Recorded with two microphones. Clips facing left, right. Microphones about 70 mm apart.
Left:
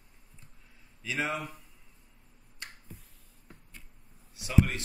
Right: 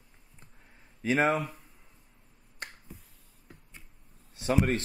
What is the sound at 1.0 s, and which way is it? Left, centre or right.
Speech, right.